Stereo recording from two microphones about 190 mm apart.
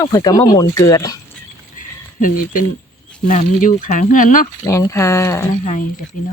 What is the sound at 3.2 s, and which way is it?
Speech, 45° left (ahead or behind).